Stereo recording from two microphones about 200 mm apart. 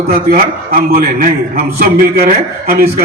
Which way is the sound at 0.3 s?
45° right (ahead or behind).